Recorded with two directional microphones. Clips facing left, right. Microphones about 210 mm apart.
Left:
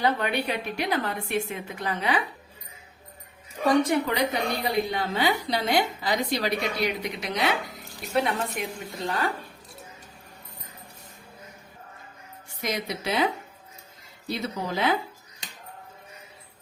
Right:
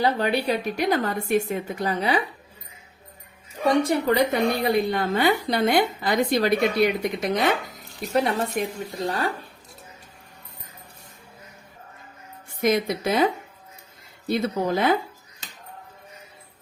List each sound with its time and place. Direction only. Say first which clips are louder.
0.0 s a woman's voice: right 3 dB; 35° right (ahead or behind)
3.7 s speech: right 1 dB; 30° right (ahead or behind)
4.1 s a woman's voice: right 6 dB; 50° right (ahead or behind)
12.5 s a woman's voice: right 9 dB; 50° right (ahead or behind)